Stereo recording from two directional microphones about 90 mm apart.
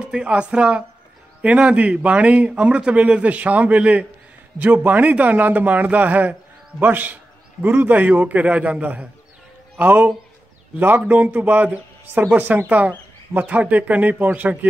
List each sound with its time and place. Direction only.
0.1 s a man's voice: 10° right (ahead or behind)